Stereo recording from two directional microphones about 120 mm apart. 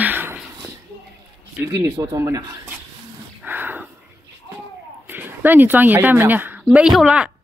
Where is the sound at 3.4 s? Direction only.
15° right (ahead or behind).